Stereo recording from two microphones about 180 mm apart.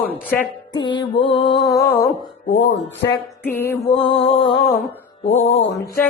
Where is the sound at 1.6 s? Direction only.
15° left (ahead or behind).